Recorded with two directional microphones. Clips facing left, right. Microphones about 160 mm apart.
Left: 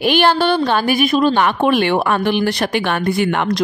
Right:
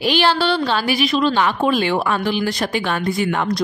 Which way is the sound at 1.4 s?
60° left (ahead or behind).